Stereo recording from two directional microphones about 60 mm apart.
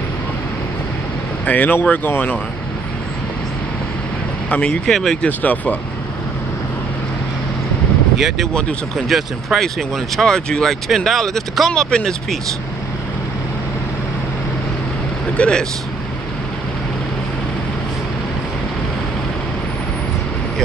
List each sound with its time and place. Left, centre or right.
1.4 s speech: left
4.5 s speech: centre
4.8 s speech: centre
5.4 s speech: left
8.2 s speech: centre
15.3 s speech: centre